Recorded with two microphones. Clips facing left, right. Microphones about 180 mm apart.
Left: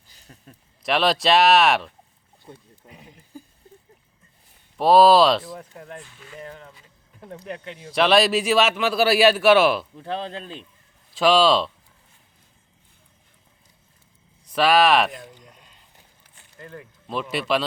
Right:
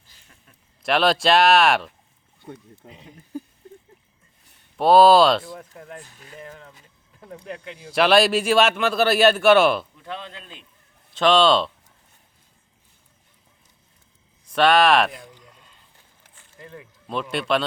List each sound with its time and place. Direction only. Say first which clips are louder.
0.2 s a sound: left 10 dB; 35° left (ahead or behind)
0.9 s speech: right 1 dB; centre (ahead or behind)
2.8 s a sound: right 2 dB; 25° right (ahead or behind)
4.8 s speech: right 1 dB; centre (ahead or behind)
6.0 s speech: left 1 dB; 40° right (ahead or behind)
6.4 s speech: left 2 dB; centre (ahead or behind)
9.9 s speech: left 6 dB; 35° left (ahead or behind)
11.2 s speech: even; 5° left (ahead or behind)
14.5 s speech: right 1 dB; 5° left (ahead or behind)
15.4 s a sound: left 1 dB; 20° left (ahead or behind)
16.6 s speech: even; centre (ahead or behind)